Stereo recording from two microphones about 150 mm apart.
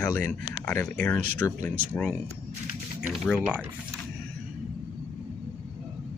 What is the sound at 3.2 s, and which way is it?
Speech, 5° right (ahead or behind).